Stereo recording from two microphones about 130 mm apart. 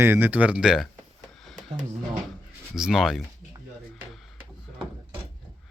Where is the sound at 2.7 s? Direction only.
5° right (ahead or behind).